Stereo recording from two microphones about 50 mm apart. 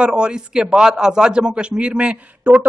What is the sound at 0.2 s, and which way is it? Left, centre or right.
A man's voice, centre.